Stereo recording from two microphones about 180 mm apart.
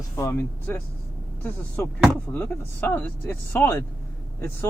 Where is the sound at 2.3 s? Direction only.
10° left (ahead or behind).